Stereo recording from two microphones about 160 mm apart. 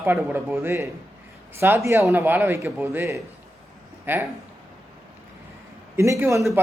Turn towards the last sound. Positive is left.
turn(degrees=-20)  # may be behind; listen again after turning